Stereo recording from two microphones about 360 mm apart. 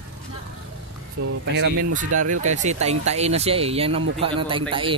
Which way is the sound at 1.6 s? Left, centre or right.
Right.